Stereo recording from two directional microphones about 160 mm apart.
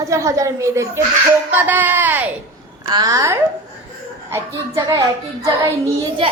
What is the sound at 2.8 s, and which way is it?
A woman's voice, 25° right (ahead or behind).